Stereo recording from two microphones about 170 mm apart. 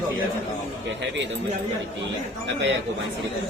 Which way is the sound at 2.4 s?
90° right.